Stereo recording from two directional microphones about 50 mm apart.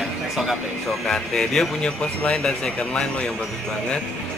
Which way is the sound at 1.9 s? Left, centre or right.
Left.